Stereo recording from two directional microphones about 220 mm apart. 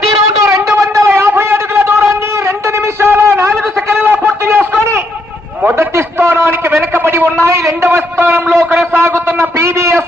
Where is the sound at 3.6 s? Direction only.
10° right (ahead or behind).